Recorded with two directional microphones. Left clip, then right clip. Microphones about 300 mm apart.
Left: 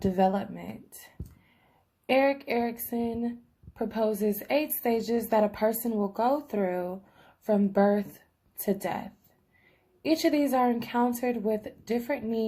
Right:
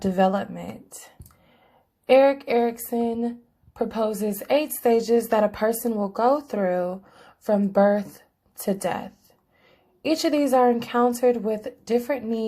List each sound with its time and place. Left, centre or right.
0.0 s speech: centre
2.0 s a woman's voice: centre